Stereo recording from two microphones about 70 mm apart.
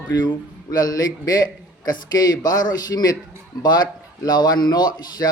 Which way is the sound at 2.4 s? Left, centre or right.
Left.